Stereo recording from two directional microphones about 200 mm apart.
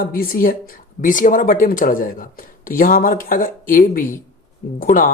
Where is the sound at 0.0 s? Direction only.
45° left (ahead or behind).